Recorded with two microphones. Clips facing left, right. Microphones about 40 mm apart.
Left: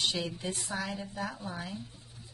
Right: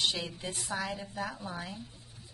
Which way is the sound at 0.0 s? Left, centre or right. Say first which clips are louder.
Even; centre.